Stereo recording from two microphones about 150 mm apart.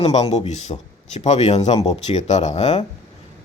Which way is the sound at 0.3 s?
50° left (ahead or behind).